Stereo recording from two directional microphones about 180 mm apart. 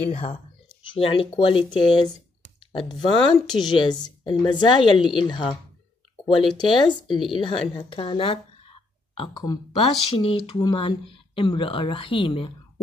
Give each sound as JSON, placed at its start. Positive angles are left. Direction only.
{"t": 0.1, "sound": "speech", "side_deg": 30}
{"t": 1.4, "sound": "a woman's voice", "side_deg": 30}
{"t": 6.2, "sound": "speech", "side_deg": 0}
{"t": 6.6, "sound": "a woman's voice", "side_deg": 25}